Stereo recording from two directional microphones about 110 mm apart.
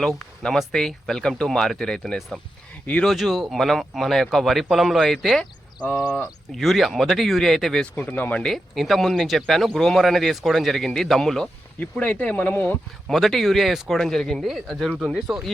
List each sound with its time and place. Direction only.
0.2 s speech: 5° left (ahead or behind)
2.8 s speech: 15° left (ahead or behind)
3.1 s speech: centre (ahead or behind)
6.6 s speech: centre (ahead or behind)
7.9 s speech: 15° left (ahead or behind)
11.8 s speech: 15° left (ahead or behind)
13.1 s speech: centre (ahead or behind)
14.8 s speech: 15° right (ahead or behind)